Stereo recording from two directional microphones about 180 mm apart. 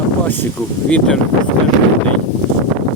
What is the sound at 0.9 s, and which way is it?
Speech, 5° left (ahead or behind).